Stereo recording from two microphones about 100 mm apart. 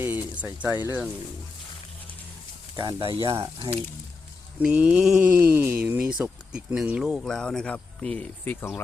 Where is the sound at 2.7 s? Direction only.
50° right (ahead or behind).